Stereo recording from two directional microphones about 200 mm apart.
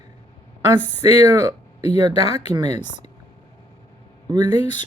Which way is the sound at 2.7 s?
35° left (ahead or behind).